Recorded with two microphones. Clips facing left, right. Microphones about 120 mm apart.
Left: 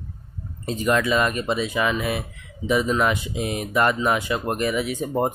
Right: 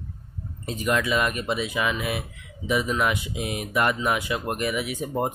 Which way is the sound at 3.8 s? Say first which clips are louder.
Left 3 dB; 30° left (ahead or behind).